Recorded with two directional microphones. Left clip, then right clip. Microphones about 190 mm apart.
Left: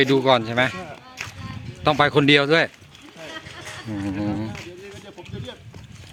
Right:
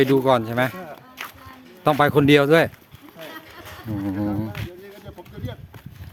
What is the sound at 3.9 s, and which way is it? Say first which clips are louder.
Speech: right 1 dB; 10° right (ahead or behind).